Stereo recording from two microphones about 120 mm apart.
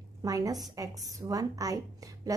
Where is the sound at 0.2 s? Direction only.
30° right (ahead or behind).